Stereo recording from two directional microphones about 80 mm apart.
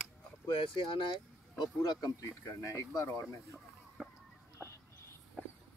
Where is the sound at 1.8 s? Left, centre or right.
Left.